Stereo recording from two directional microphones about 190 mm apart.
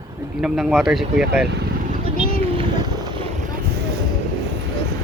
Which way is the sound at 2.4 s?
25° right (ahead or behind).